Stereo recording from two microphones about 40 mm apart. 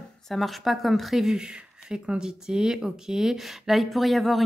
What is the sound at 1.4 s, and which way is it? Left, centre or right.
Speech, centre.